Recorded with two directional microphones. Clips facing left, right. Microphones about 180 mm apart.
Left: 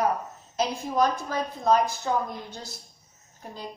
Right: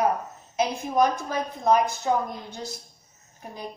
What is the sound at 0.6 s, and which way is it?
A woman's voice, 15° right (ahead or behind).